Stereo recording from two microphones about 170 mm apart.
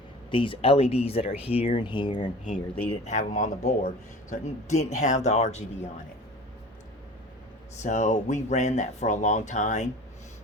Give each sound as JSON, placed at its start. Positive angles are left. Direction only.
{"t": 0.3, "sound": "speech", "side_deg": 30}
{"t": 2.4, "sound": "speech", "side_deg": 50}
{"t": 7.8, "sound": "speech", "side_deg": 45}